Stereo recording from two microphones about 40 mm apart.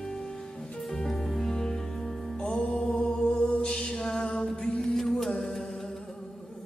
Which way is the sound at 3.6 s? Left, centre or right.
Centre.